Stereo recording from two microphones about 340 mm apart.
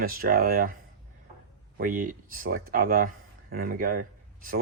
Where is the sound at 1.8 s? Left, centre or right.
Right.